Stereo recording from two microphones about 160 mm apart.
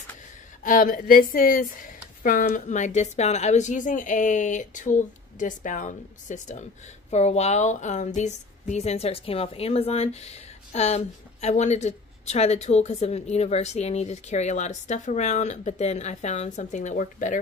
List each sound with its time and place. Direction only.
0.7 s a woman's voice: 55° left (ahead or behind)